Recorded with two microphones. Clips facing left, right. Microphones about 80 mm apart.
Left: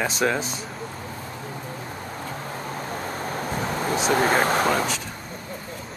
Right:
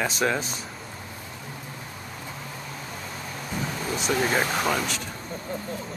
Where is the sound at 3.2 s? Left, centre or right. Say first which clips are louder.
Left 3 dB; left.